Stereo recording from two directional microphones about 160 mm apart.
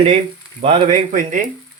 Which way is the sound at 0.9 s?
55° right (ahead or behind).